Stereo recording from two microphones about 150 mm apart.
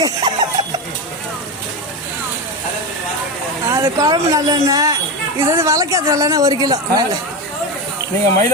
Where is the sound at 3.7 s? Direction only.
20° right (ahead or behind).